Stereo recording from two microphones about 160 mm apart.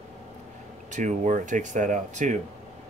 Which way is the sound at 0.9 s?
50° right (ahead or behind).